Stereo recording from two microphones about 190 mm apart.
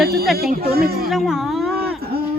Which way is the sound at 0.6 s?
55° right (ahead or behind).